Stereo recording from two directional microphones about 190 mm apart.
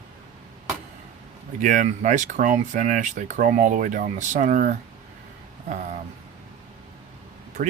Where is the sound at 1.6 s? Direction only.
40° right (ahead or behind).